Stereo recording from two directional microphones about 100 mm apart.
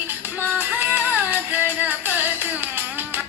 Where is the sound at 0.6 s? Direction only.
20° right (ahead or behind).